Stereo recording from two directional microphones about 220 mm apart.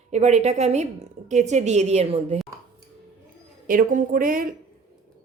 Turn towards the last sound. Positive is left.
turn(degrees=-40)  # may be behind; listen again after turning